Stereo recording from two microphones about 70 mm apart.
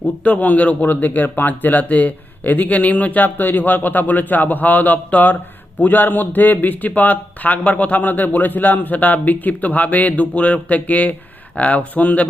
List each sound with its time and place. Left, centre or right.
0.0 s speech: left